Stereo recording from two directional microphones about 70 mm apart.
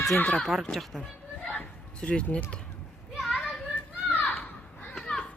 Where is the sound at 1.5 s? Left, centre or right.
Centre.